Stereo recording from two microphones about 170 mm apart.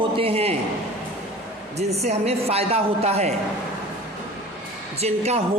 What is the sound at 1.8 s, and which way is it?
A woman's voice, 40° right (ahead or behind).